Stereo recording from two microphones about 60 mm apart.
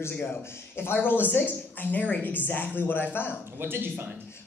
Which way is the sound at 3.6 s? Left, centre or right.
Right.